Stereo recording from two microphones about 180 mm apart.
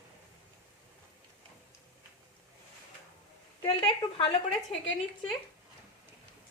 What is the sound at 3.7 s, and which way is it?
Speech, 30° left (ahead or behind).